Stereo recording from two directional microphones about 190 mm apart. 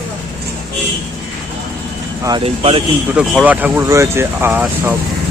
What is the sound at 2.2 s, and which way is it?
Speech, 25° right (ahead or behind).